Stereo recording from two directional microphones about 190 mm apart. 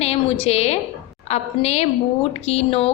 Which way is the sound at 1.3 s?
35° left (ahead or behind).